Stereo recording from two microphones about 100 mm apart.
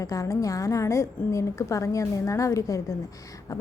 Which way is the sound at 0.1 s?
30° left (ahead or behind).